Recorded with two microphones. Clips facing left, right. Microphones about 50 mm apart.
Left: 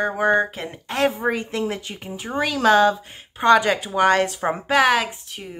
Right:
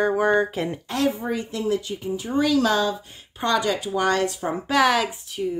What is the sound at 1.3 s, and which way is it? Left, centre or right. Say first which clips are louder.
A woman's voice: left 1 dB; left.